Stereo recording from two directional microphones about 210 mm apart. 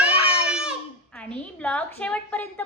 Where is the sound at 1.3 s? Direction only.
5° left (ahead or behind).